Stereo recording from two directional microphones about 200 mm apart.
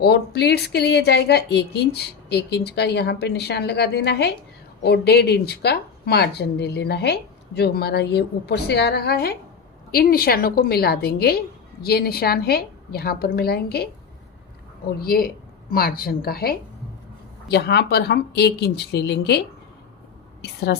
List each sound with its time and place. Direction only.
0.0 s a woman's voice: 55° left (ahead or behind)
15.0 s a woman's voice: 50° left (ahead or behind)